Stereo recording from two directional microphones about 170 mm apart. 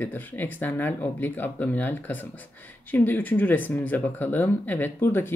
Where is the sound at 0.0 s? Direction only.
10° left (ahead or behind).